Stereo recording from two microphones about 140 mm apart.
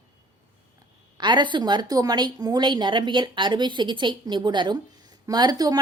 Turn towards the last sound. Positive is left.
turn(degrees=-30)  # may be behind; listen again after turning